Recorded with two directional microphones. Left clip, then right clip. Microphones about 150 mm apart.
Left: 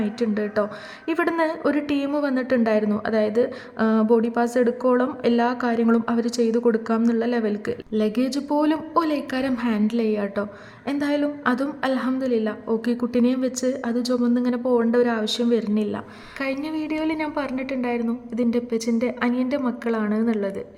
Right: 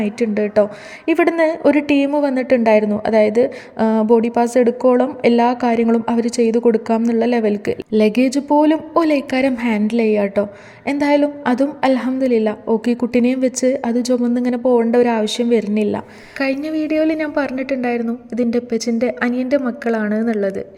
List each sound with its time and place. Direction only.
0.0 s a woman's voice: 20° right (ahead or behind)